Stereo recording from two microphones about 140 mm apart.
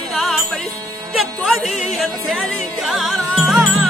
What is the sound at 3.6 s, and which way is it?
Music, 10° right (ahead or behind).